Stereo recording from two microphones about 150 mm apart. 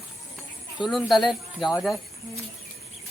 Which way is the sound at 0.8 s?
Centre (ahead or behind).